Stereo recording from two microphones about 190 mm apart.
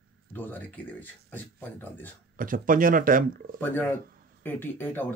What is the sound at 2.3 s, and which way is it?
Speech, 45° right (ahead or behind).